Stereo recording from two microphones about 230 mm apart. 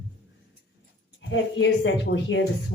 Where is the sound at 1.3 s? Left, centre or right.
Left.